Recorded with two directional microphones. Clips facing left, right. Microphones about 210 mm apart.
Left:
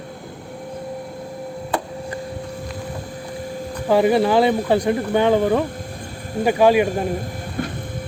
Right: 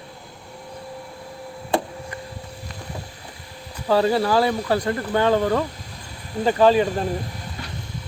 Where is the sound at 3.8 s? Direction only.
15° left (ahead or behind).